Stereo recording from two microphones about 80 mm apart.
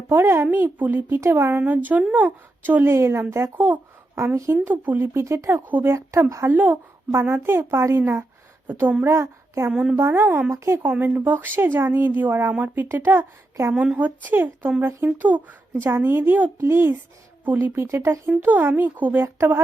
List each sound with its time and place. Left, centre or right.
0.1 s speech: right
1.2 s a woman's voice: right
1.6 s a woman's voice: right
3.6 s a sound: right
4.5 s speech: right
5.2 s a woman's voice: right
5.6 s a woman's voice: right
6.5 s a woman's voice: right
8.6 s speech: right
9.0 s a woman's voice: right
11.0 s speech: right
13.7 s a woman's voice: centre
17.8 s a woman's voice: right
18.3 s speech: right